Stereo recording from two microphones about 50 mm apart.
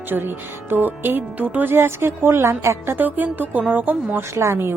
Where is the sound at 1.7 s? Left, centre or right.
Right.